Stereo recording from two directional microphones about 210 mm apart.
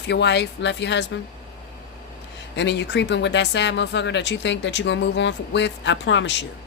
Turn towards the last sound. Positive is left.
turn(degrees=60)  # may be behind; listen again after turning